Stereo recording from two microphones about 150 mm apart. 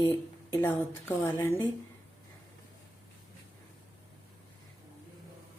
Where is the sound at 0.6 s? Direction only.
15° left (ahead or behind).